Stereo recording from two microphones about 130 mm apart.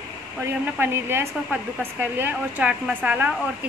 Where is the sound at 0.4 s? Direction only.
15° right (ahead or behind).